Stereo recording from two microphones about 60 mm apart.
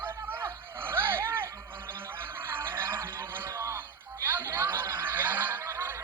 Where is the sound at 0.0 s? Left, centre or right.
Right.